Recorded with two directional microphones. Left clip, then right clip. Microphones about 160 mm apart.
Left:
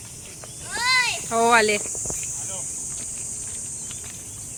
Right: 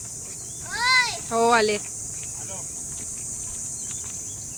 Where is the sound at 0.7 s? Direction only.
30° right (ahead or behind).